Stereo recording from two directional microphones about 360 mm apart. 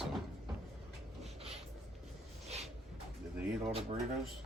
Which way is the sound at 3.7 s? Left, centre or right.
Centre.